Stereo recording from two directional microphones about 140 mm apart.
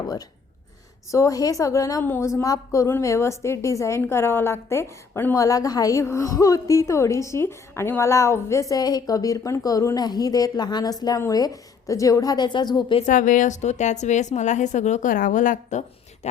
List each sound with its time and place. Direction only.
1.1 s a woman's voice: 25° left (ahead or behind)
13.1 s a woman's voice: 65° left (ahead or behind)